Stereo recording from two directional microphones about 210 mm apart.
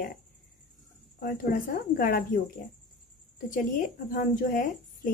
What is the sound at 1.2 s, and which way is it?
Speech, 45° left (ahead or behind).